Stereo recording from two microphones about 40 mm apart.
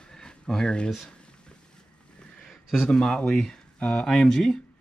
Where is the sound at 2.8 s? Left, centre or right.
Centre.